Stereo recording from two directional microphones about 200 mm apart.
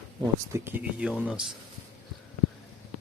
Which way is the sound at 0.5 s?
10° right (ahead or behind).